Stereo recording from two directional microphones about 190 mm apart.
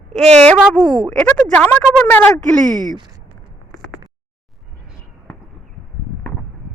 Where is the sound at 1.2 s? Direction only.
5° left (ahead or behind).